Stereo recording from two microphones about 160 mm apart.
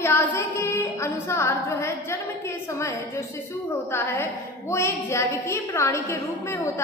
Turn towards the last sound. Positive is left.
turn(degrees=15)  # may be behind; listen again after turning